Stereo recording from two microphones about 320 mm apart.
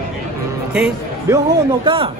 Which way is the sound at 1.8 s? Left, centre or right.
Centre.